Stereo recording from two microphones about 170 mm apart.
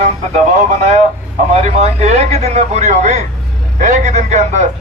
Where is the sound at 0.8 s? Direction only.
40° right (ahead or behind).